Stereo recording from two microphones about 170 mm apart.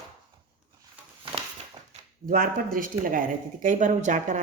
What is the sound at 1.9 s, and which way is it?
A woman's voice, 55° right (ahead or behind).